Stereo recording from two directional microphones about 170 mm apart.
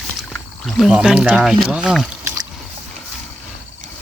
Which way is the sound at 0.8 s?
5° right (ahead or behind).